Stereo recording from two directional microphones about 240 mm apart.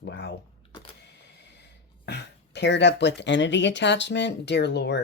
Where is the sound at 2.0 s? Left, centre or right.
Left.